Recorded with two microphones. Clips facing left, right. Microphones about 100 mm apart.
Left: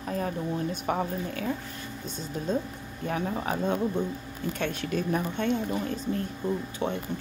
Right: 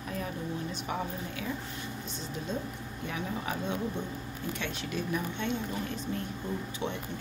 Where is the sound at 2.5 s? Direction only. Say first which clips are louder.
Left 9 dB; 40° left (ahead or behind).